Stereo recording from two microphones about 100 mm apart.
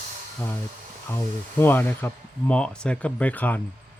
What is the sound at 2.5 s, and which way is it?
Speech, 10° left (ahead or behind).